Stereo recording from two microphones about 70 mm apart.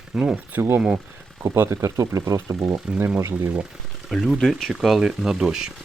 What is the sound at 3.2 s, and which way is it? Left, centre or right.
Speech, right.